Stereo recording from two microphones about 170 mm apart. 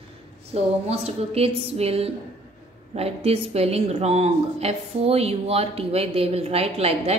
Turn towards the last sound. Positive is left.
turn(degrees=-35)  # may be behind; listen again after turning